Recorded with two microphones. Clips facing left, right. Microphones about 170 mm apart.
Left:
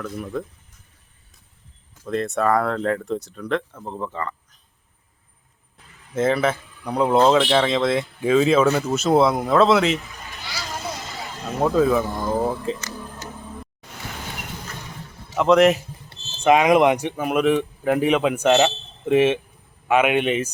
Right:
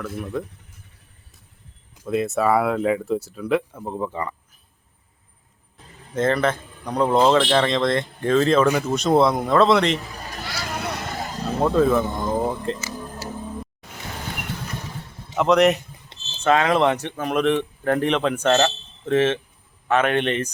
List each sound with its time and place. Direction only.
0.0 s speech: 5° right (ahead or behind)
2.0 s speech: 5° right (ahead or behind)
6.1 s speech: 5° left (ahead or behind)
10.1 s a sound: 40° right (ahead or behind)
10.6 s vehicle: 65° right (ahead or behind)
11.6 s speech: centre (ahead or behind)
15.4 s speech: centre (ahead or behind)
16.4 s speech: 15° left (ahead or behind)